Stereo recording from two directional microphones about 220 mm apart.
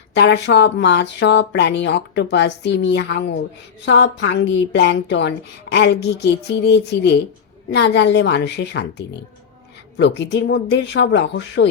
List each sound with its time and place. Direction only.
0.1 s a woman's voice: 50° left (ahead or behind)